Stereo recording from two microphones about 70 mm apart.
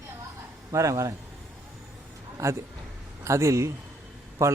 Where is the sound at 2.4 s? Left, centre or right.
Right.